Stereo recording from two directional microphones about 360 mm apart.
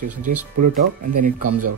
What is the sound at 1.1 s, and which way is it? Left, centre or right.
Speech, right.